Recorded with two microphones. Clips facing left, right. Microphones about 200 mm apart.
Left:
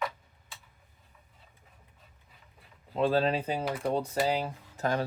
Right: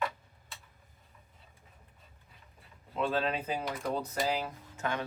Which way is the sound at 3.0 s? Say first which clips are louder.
Left 5 dB; 35° left (ahead or behind).